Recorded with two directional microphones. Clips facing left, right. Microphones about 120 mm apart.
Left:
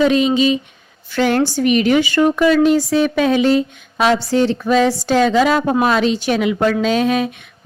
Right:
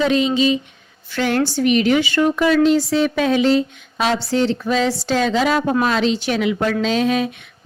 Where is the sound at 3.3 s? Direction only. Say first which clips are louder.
Left 2 dB; 50° left (ahead or behind).